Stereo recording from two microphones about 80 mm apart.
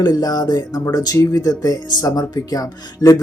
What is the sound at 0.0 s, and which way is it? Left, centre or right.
Speech, left.